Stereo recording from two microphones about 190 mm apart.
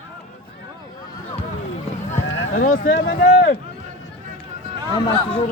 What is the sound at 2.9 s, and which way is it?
Speech, 80° left.